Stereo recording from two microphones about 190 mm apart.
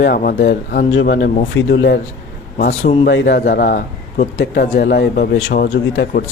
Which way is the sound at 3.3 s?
55° left (ahead or behind).